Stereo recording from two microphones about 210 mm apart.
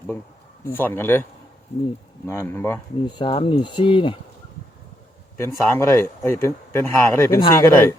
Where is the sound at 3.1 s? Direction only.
25° left (ahead or behind).